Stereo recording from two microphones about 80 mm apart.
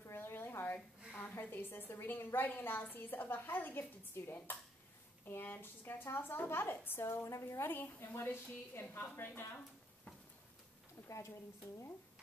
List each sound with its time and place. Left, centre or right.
0.0 s a sound: left
1.1 s a woman's voice: left
11.1 s a woman's voice: left